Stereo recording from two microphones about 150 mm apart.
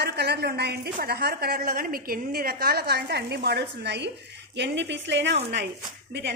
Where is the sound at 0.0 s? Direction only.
90° right.